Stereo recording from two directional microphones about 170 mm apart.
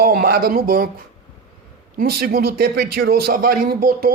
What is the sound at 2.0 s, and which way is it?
A man's voice, 60° right (ahead or behind).